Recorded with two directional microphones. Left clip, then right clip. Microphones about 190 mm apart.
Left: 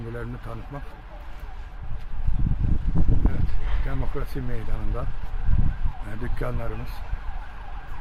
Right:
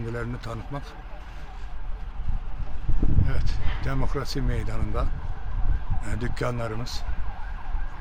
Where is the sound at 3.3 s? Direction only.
25° right (ahead or behind).